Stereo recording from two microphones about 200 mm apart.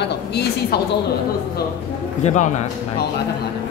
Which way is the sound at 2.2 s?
35° left (ahead or behind).